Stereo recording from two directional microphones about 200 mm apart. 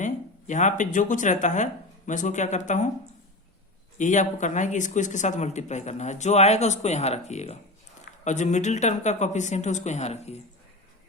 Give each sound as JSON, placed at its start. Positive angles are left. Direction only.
{"t": 0.0, "sound": "speech", "side_deg": 40}
{"t": 3.9, "sound": "speech", "side_deg": 40}